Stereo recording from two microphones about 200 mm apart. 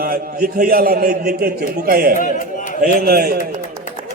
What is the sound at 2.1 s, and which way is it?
Speech, 40° left (ahead or behind).